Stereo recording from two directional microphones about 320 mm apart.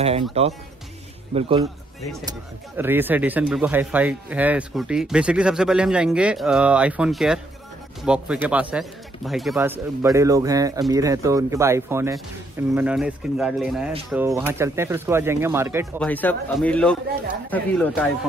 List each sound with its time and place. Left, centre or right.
0.0 s speech: centre
2.8 s speech: centre
16.0 s speech: centre